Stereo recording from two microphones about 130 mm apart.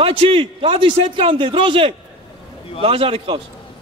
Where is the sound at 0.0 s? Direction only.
45° right (ahead or behind).